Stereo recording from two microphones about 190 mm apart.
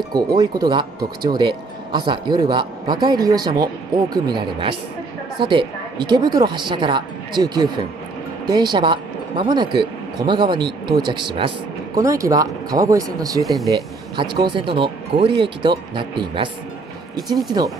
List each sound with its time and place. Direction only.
0.1 s speech: 20° right (ahead or behind)